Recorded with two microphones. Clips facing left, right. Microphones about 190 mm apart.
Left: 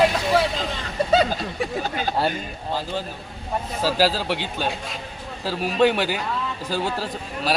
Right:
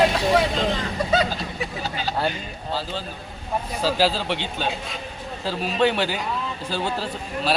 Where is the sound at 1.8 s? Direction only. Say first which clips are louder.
Left 2 dB; 50° left (ahead or behind).